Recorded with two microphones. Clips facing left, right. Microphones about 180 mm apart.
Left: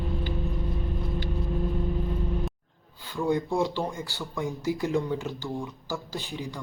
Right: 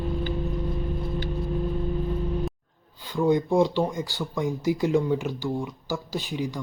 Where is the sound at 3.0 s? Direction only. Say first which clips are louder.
Right 4 dB; 20° right (ahead or behind).